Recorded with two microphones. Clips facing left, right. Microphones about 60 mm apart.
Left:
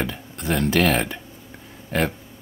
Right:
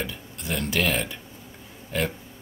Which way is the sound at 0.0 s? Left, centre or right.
Left.